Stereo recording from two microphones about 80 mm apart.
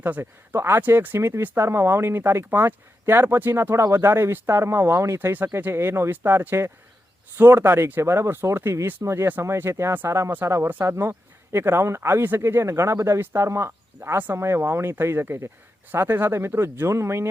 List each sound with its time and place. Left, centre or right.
0.0 s speech: right